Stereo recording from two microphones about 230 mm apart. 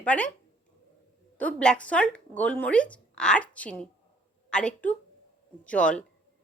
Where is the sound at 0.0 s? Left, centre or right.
Centre.